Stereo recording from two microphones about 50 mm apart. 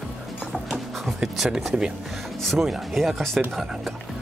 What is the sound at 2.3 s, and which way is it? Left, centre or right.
Speech, centre.